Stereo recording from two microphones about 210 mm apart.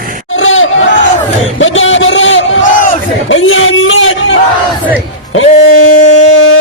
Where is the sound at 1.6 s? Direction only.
65° left (ahead or behind).